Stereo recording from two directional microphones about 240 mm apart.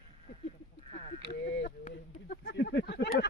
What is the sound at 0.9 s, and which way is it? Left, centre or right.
Speech, left.